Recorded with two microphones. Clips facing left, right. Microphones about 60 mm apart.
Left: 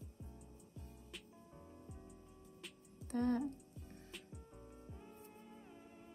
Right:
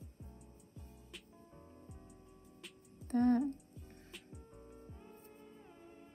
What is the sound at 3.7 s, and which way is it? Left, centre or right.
Music, centre.